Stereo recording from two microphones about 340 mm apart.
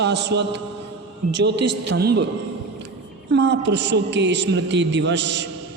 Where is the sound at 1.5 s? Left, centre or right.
Right.